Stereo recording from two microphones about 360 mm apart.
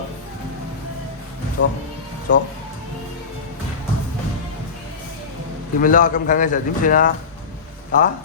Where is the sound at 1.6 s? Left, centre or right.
Left.